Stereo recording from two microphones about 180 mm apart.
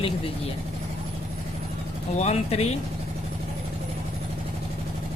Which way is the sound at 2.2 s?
35° left (ahead or behind).